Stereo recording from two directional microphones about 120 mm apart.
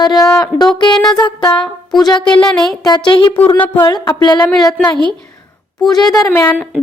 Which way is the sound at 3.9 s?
35° left (ahead or behind).